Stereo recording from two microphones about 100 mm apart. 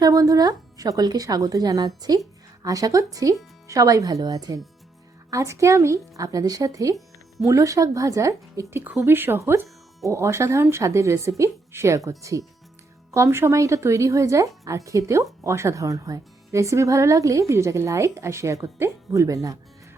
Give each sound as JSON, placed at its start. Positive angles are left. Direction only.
{"t": 0.0, "sound": "speech", "side_deg": -35}
{"t": 8.8, "sound": "speech", "side_deg": -20}